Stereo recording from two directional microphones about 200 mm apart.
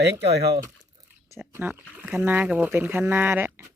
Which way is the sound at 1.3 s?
15° right (ahead or behind).